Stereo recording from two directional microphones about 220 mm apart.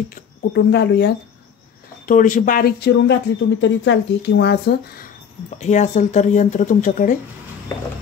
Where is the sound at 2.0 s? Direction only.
35° left (ahead or behind).